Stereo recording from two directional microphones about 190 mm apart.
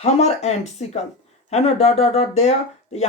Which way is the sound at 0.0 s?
35° left (ahead or behind).